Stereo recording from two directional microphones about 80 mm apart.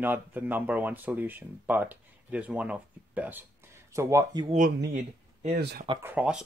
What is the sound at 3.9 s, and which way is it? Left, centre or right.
Speech, right.